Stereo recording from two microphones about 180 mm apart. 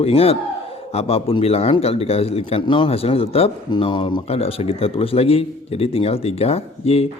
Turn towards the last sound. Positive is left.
turn(degrees=35)  # may be behind; listen again after turning